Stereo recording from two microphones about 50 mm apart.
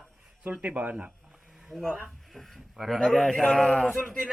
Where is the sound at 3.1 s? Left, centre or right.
Centre.